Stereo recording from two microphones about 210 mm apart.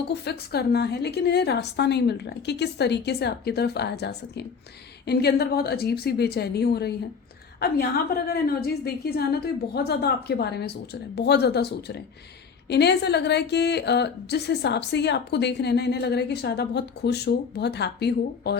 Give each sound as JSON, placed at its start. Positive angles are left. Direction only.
{"t": 0.1, "sound": "a woman's voice", "side_deg": 50}